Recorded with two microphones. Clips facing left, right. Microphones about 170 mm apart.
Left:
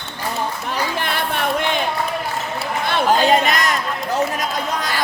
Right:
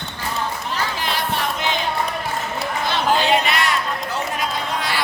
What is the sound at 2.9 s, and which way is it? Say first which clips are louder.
Chatter: left 3 dB; 45° left (ahead or behind).